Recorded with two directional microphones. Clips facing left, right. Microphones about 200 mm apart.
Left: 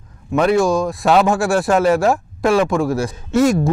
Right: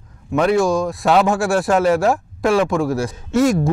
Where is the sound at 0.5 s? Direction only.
10° left (ahead or behind).